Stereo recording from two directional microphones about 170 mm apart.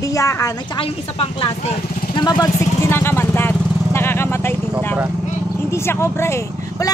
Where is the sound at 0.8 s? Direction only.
30° left (ahead or behind).